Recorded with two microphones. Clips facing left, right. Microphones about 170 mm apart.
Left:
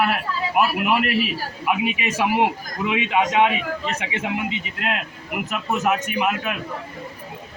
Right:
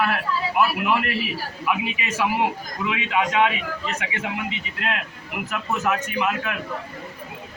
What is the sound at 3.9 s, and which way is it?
A man's voice, 25° left (ahead or behind).